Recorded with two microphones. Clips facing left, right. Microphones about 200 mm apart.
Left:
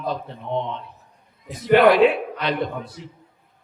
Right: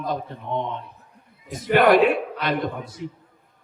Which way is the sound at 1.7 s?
50° right (ahead or behind).